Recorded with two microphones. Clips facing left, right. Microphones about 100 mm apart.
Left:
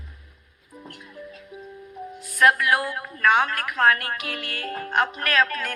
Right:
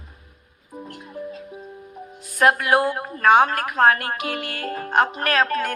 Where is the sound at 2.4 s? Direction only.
35° right (ahead or behind).